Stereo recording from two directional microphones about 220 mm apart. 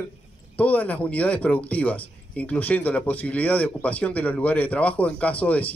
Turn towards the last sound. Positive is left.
turn(degrees=5)  # may be behind; listen again after turning